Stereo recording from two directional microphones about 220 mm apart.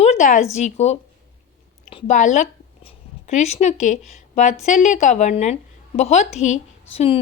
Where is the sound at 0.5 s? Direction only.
30° left (ahead or behind).